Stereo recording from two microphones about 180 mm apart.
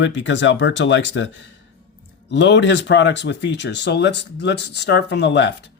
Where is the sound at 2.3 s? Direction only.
80° left.